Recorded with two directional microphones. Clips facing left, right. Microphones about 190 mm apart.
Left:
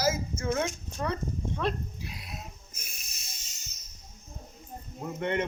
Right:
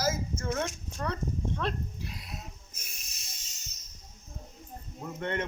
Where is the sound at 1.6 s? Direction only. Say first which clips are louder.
Left 2 dB; 10° left (ahead or behind).